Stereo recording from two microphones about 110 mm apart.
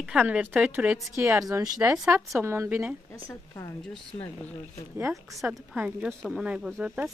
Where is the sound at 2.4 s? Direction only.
25° right (ahead or behind).